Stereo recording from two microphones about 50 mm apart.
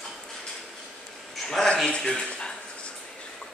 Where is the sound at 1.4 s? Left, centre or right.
Centre.